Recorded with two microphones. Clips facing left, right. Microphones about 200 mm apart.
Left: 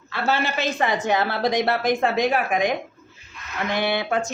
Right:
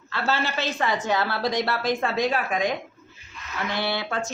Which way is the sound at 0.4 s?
15° left (ahead or behind).